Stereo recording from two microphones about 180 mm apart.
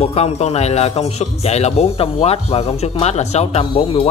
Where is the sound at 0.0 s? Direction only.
35° left (ahead or behind).